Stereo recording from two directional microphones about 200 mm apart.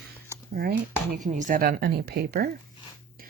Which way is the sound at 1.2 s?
40° right (ahead or behind).